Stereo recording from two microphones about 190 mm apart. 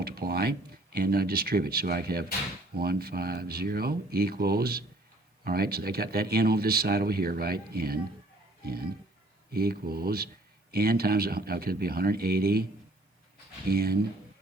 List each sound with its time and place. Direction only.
0.0 s a sound: 55° right (ahead or behind)
0.9 s speech: 55° right (ahead or behind)
13.7 s speech: 55° right (ahead or behind)